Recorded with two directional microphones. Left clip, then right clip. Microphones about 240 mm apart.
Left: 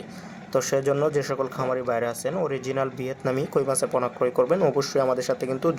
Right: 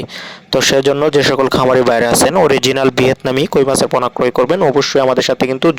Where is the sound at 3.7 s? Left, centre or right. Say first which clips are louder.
Right 11 dB; right.